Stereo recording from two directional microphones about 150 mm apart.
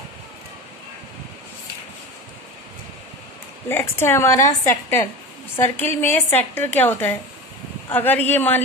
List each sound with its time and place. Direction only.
3.6 s a woman's voice: 15° left (ahead or behind)